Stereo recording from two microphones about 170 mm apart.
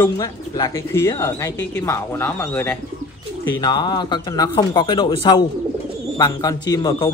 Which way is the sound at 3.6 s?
25° left (ahead or behind).